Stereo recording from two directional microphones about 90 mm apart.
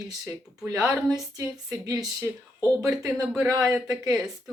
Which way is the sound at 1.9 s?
40° right (ahead or behind).